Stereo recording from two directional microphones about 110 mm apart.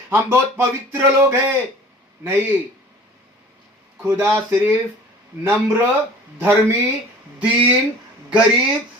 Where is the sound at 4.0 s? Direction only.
25° right (ahead or behind).